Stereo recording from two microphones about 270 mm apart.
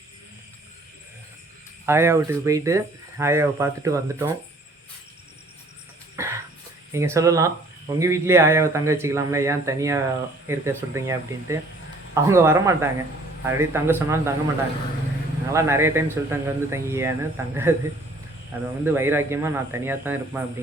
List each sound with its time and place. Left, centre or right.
1.9 s speech: centre
6.1 s cough: centre
6.9 s speech: centre
15.5 s speech: centre